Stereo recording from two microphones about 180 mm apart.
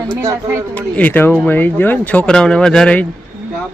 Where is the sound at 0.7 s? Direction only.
10° left (ahead or behind).